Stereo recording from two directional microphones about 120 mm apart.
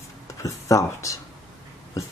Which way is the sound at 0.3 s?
25° left (ahead or behind).